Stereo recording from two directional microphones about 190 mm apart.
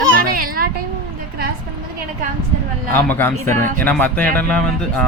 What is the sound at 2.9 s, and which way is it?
Speech, 10° left (ahead or behind).